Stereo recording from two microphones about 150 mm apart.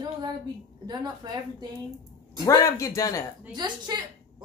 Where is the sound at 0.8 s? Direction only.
30° right (ahead or behind).